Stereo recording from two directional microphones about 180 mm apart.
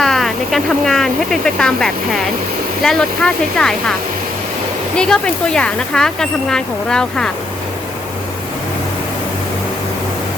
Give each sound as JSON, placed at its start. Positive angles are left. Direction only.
{"t": 0.0, "sound": "speech", "side_deg": 0}
{"t": 4.9, "sound": "speech", "side_deg": 5}